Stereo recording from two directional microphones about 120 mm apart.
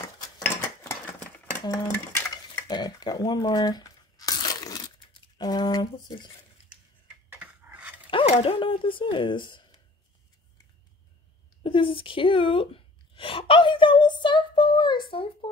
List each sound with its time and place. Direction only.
1.6 s dishes: 30° left (ahead or behind)
7.3 s cutlery: 10° right (ahead or behind)
8.1 s speech: 50° left (ahead or behind)
11.6 s a sound: 50° left (ahead or behind)